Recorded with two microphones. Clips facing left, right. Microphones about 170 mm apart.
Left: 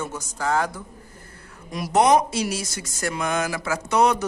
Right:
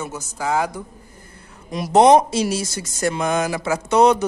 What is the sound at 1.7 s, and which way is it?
Speech, 25° right (ahead or behind).